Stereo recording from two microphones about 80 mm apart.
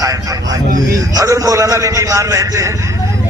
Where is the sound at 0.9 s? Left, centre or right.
Right.